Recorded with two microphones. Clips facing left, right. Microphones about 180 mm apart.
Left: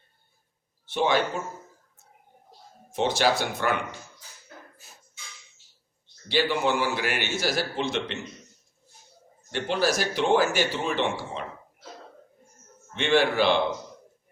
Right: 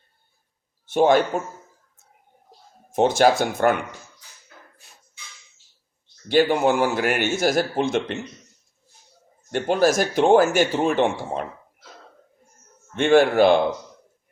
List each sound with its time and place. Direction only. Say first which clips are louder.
0.9 s a man's voice: right 7 dB; 45° right (ahead or behind)
2.9 s a man's voice: right 6 dB; 50° right (ahead or behind)
4.8 s dog: left 1 dB; 5° left (ahead or behind)
6.2 s a man's voice: right 7 dB; 50° right (ahead or behind)
9.5 s a man's voice: right 6 dB; 50° right (ahead or behind)
12.9 s a man's voice: right 6 dB; 45° right (ahead or behind)